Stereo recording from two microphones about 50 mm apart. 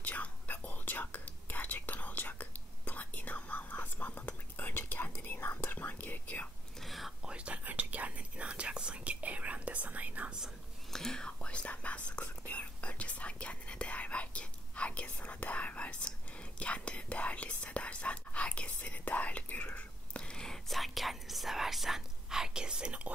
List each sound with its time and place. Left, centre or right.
0.0 s whispering: left
6.8 s whispering: centre
7.2 s whispering: right
10.9 s whispering: centre; by 20.2 s left
20.2 s whispering: centre; by 23.1 s right